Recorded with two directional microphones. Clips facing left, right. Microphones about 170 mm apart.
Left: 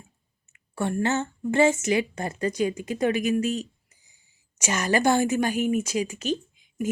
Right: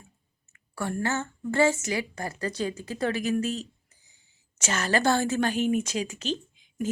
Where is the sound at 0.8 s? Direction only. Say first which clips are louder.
Left 4 dB; 20° left (ahead or behind).